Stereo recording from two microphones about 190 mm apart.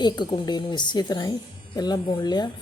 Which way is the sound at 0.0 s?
25° left (ahead or behind).